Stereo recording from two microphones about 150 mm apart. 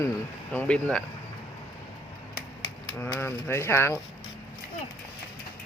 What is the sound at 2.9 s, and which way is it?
Speech, 15° left (ahead or behind).